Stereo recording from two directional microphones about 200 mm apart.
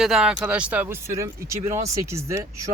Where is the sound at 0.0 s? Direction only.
Centre (ahead or behind).